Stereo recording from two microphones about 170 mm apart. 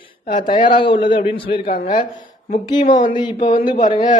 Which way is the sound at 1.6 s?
55° left (ahead or behind).